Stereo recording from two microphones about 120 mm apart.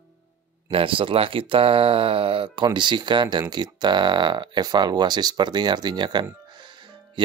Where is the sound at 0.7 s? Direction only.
45° right (ahead or behind).